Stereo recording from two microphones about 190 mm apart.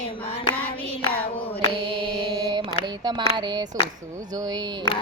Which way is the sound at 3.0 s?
20° right (ahead or behind).